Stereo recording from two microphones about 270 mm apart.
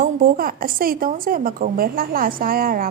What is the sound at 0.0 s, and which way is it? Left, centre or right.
A woman's voice, right.